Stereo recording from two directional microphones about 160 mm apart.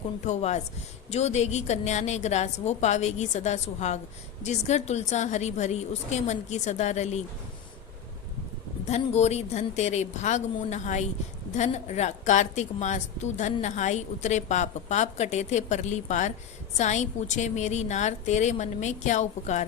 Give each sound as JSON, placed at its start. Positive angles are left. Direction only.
{"t": 0.3, "sound": "a woman's voice", "side_deg": 45}
{"t": 8.9, "sound": "a woman's voice", "side_deg": 45}